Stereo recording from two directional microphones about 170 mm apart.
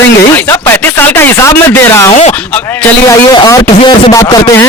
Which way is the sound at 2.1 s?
40° left (ahead or behind).